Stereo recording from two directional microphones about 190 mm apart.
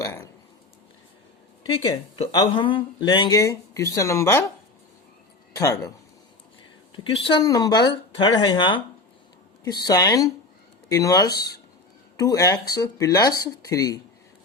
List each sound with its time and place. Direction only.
0.0 s speech: 15° left (ahead or behind)
2.3 s speech: 25° left (ahead or behind)
5.5 s speech: 15° left (ahead or behind)
6.9 s speech: 25° left (ahead or behind)